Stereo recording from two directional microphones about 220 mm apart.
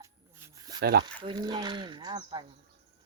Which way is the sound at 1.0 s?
20° right (ahead or behind).